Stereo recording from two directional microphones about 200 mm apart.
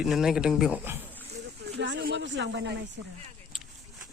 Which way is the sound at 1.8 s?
60° right (ahead or behind).